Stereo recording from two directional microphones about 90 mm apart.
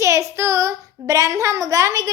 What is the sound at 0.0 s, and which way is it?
Child singing, 35° right (ahead or behind).